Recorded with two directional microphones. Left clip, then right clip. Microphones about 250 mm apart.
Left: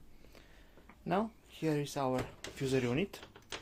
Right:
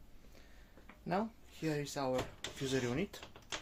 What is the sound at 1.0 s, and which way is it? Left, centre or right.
Speech, left.